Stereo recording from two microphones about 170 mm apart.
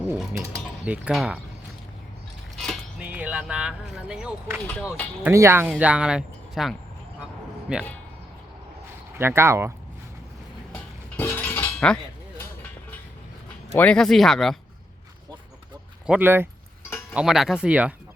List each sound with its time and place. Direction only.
0.1 s speech: 5° right (ahead or behind)
3.0 s speech: 10° right (ahead or behind)
5.2 s speech: 15° right (ahead or behind)
9.1 s speech: 15° right (ahead or behind)
11.2 s a sound: 15° left (ahead or behind)
13.7 s speech: 5° left (ahead or behind)
16.0 s speech: 10° right (ahead or behind)